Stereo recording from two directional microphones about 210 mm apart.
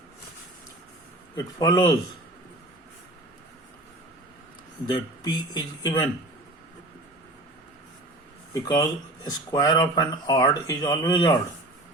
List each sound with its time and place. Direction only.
1.5 s speech: 20° left (ahead or behind)
4.9 s speech: 20° left (ahead or behind)
8.5 s speech: 15° left (ahead or behind)